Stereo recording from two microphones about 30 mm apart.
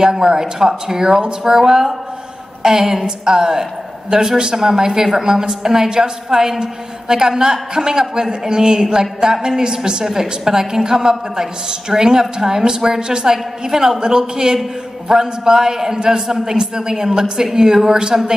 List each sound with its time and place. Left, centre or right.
0.0 s a woman's voice: right